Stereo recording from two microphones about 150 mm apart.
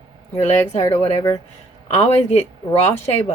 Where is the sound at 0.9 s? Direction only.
20° left (ahead or behind).